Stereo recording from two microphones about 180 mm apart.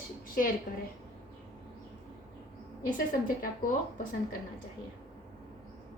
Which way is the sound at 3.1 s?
50° left (ahead or behind).